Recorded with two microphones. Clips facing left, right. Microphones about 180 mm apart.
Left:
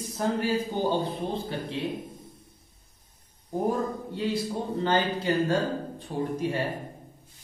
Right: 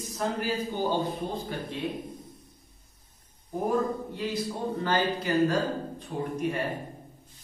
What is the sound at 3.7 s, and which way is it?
A man's voice, 30° left (ahead or behind).